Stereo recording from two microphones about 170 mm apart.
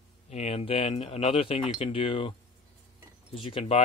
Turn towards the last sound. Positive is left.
turn(degrees=35)  # may be behind; listen again after turning